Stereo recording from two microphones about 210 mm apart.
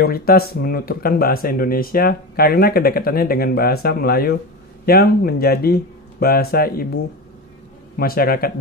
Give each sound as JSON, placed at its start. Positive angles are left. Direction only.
{"t": 0.0, "sound": "speech", "side_deg": 45}
{"t": 8.0, "sound": "speech", "side_deg": 45}